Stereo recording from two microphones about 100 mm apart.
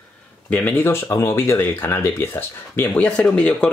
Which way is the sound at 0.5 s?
15° left (ahead or behind).